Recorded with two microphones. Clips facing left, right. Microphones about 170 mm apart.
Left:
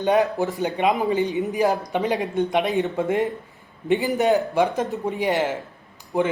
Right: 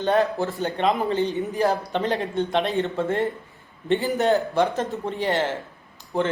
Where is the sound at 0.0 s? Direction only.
15° left (ahead or behind).